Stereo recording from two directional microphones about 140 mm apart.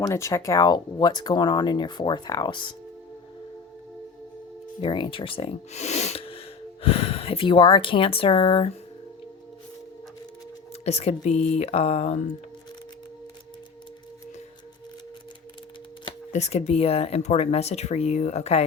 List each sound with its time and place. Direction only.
0.0 s speech: 20° left (ahead or behind)
4.8 s speech: 35° left (ahead or behind)
10.8 s speech: 50° left (ahead or behind)
16.3 s speech: 50° left (ahead or behind)